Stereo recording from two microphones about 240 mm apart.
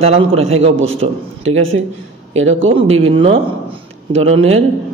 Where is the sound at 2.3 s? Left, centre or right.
Right.